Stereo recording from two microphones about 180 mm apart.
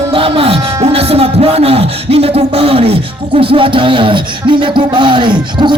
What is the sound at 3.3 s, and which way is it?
Speech, 30° right (ahead or behind).